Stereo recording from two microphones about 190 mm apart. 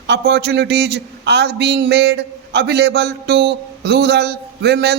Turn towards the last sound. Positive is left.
turn(degrees=-60)  # may be behind; listen again after turning